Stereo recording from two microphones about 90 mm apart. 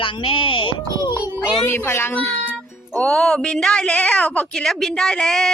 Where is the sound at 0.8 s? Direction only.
40° right (ahead or behind).